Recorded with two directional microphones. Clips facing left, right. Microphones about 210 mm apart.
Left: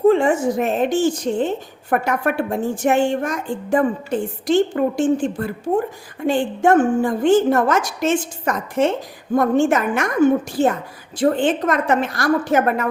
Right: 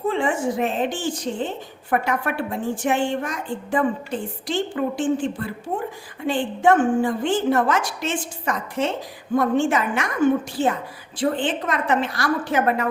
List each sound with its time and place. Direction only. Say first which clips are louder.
0.1 s a woman's voice: left 6 dB; 40° left (ahead or behind)
10.6 s a woman's voice: left 5 dB; 10° left (ahead or behind)
11.2 s a woman's voice: left 5 dB; 45° left (ahead or behind)